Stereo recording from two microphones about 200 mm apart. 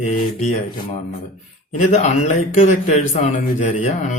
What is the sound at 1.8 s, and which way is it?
A man's voice, 35° left (ahead or behind).